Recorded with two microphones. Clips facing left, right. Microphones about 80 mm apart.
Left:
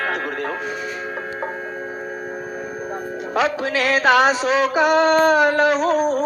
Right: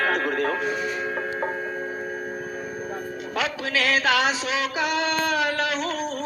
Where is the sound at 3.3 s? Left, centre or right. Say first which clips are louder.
Left 6 dB; left.